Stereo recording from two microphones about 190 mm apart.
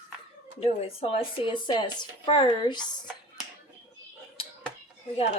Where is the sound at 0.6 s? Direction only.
30° left (ahead or behind).